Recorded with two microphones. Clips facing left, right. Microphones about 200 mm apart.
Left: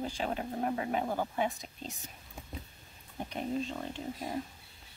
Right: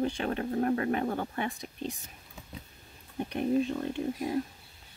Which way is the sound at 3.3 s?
60° right (ahead or behind).